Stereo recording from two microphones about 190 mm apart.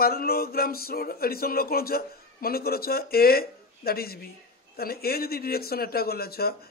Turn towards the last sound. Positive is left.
turn(degrees=55)  # may be behind; listen again after turning